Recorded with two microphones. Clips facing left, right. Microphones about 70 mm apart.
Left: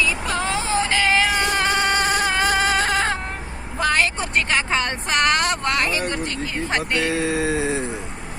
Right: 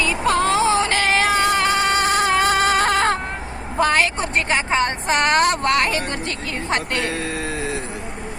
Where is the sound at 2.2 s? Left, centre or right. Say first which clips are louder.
Right 3 dB; right.